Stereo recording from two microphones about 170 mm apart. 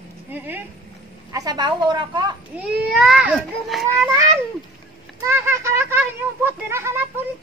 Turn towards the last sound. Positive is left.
turn(degrees=-15)  # may be behind; listen again after turning